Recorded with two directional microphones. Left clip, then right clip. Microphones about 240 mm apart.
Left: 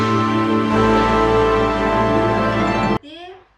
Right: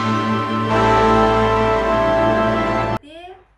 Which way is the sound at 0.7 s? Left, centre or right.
Centre.